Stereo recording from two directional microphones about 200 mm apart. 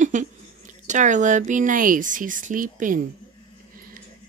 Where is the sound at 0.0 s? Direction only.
40° right (ahead or behind).